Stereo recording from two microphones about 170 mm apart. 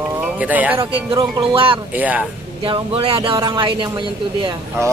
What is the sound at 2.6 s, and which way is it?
Speech, 30° right (ahead or behind).